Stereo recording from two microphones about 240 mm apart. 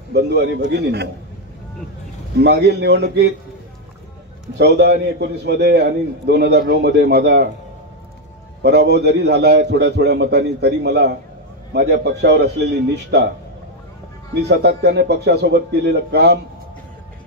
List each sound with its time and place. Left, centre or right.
0.1 s a man's voice: right
2.4 s a man's voice: right
4.6 s a man's voice: right
8.6 s a man's voice: right
14.5 s a man's voice: right